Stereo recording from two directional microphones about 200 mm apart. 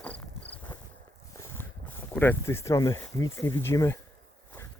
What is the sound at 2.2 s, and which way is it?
Speech, 10° left (ahead or behind).